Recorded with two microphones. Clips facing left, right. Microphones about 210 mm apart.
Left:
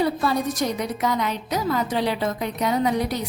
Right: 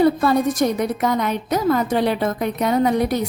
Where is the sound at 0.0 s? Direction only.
50° right (ahead or behind).